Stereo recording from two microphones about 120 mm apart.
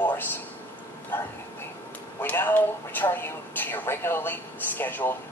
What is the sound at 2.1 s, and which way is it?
Speech, 15° left (ahead or behind).